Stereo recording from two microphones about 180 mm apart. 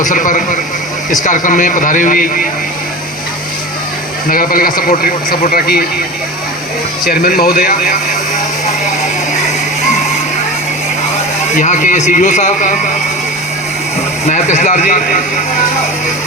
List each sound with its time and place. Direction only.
0.0 s a man's voice: 45° left (ahead or behind)
4.3 s a man's voice: 50° left (ahead or behind)
7.1 s speech: 55° left (ahead or behind)
11.5 s a man's voice: 45° left (ahead or behind)
14.3 s a man's voice: 40° left (ahead or behind)